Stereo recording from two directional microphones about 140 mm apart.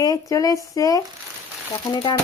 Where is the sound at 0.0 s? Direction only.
25° left (ahead or behind).